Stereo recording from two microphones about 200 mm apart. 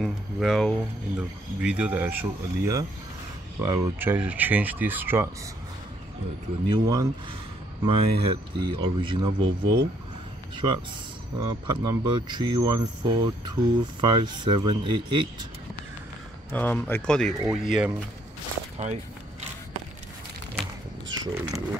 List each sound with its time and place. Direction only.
0.0 s speech: centre (ahead or behind)
6.7 s speech: 20° right (ahead or behind)
16.5 s speech: 10° left (ahead or behind)
21.1 s speech: 20° right (ahead or behind)